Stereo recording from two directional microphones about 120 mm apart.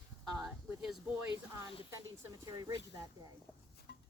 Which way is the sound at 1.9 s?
30° right (ahead or behind).